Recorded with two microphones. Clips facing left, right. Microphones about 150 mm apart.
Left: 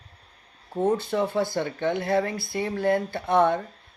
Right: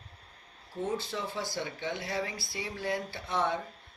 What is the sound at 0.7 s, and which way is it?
Speech, 55° left (ahead or behind).